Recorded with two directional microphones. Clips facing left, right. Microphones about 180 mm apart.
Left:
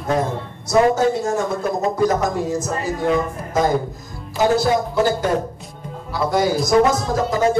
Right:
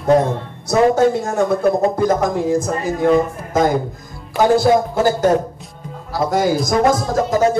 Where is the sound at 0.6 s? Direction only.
60° right (ahead or behind).